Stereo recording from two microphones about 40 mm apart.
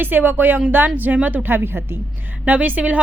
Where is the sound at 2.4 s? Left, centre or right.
Right.